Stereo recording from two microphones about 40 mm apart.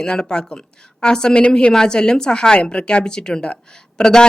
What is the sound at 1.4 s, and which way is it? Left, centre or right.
Speech, left.